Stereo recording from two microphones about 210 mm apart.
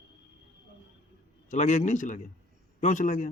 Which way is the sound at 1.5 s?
35° left (ahead or behind).